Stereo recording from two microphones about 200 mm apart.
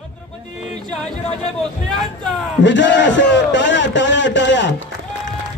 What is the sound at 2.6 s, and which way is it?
A man's voice, 65° left (ahead or behind).